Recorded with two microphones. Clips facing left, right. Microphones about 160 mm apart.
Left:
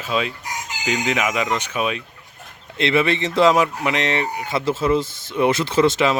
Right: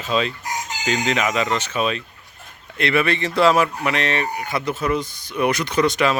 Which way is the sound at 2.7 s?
20° left (ahead or behind).